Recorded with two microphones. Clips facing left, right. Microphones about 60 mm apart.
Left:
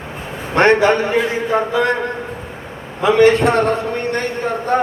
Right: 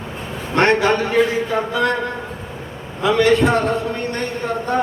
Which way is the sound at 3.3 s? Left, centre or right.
Left.